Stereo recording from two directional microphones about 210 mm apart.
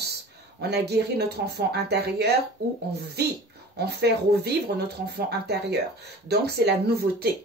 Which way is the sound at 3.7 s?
50° right (ahead or behind).